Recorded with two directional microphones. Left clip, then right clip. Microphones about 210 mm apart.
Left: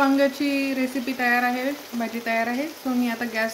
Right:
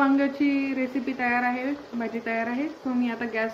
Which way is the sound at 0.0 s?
30° left (ahead or behind).